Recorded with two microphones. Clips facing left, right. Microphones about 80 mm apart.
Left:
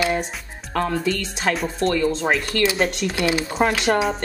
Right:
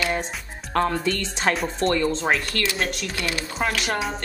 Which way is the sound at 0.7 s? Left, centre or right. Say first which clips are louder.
Even; centre.